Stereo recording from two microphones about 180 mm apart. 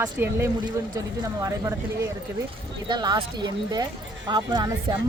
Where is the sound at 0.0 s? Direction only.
15° right (ahead or behind).